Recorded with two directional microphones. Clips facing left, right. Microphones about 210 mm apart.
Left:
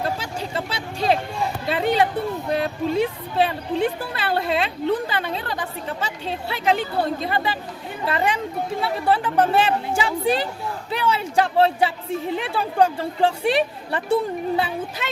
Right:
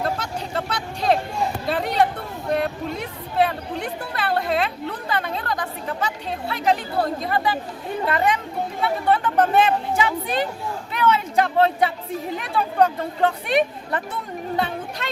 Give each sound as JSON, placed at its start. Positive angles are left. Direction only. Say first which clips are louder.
{"t": 0.7, "sound": "vehicle", "louder": "even", "side_deg": 30}
{"t": 1.6, "sound": "a sound", "louder": "left 3 dB", "side_deg": 0}
{"t": 2.6, "sound": "a woman's voice", "louder": "left 4 dB", "side_deg": 30}
{"t": 14.5, "sound": "speech", "louder": "left 1 dB", "side_deg": 5}